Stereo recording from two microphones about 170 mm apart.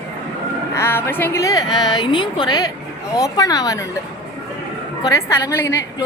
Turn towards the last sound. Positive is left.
turn(degrees=15)  # may be behind; listen again after turning